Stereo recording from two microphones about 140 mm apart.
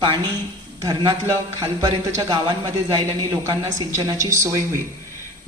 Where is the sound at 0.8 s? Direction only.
30° right (ahead or behind).